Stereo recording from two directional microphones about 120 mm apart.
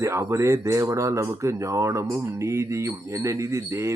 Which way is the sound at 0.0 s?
25° right (ahead or behind).